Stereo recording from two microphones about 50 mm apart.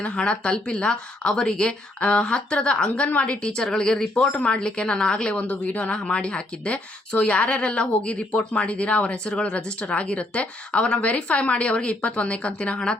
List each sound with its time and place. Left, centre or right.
0.0 s speech: left
5.4 s speech: left
5.9 s speech: centre